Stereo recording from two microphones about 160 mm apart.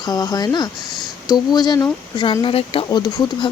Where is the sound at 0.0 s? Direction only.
25° left (ahead or behind).